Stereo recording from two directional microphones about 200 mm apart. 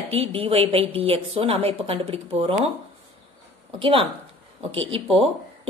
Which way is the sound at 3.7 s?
25° right (ahead or behind).